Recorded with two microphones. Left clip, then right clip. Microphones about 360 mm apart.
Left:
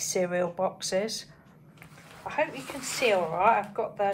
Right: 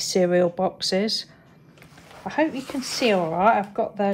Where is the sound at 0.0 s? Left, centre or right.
Right.